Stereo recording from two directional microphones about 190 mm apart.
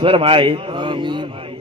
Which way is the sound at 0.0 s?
25° right (ahead or behind).